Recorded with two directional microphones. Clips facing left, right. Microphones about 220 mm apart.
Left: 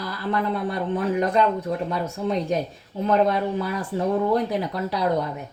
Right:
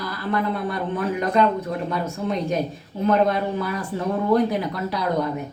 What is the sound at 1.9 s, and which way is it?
A woman's voice, 35° left (ahead or behind).